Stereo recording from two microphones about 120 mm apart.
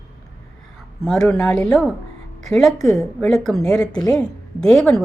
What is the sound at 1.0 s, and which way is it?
A woman's voice, 5° left (ahead or behind).